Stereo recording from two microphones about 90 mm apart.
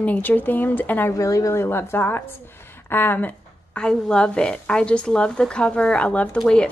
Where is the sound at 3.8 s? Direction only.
10° left (ahead or behind).